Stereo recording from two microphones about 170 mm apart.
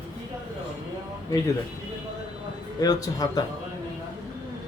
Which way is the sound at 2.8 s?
20° left (ahead or behind).